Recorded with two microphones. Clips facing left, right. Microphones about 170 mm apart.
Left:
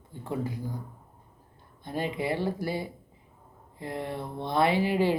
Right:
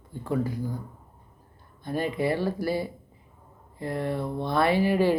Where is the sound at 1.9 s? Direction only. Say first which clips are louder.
Right 4 dB; 20° left (ahead or behind).